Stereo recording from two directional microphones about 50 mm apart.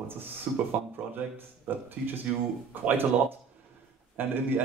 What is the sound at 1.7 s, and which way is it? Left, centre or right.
A man's voice, right.